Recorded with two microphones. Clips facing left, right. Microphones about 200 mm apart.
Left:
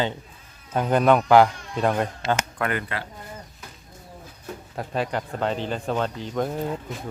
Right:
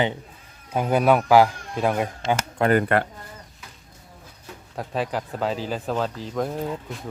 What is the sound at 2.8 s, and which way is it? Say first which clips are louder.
Speech: right 11 dB; 55° right (ahead or behind).